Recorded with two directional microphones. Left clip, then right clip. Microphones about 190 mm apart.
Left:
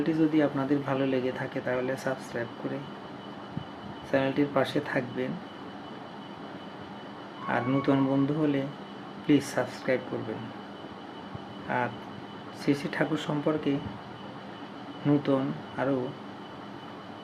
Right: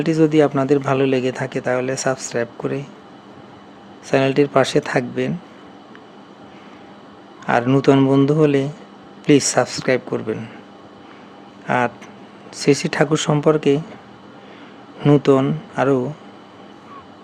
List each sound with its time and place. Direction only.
0.0 s speech: 65° right (ahead or behind)
4.1 s speech: 65° right (ahead or behind)
7.4 s speech: 65° right (ahead or behind)
12.6 s speech: 65° right (ahead or behind)
15.0 s speech: 65° right (ahead or behind)